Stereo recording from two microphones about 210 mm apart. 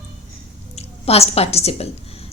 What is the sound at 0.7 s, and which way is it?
A woman's voice, 30° left (ahead or behind).